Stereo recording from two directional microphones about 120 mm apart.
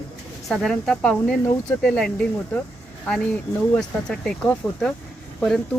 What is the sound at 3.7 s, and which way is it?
Speech, 5° left (ahead or behind).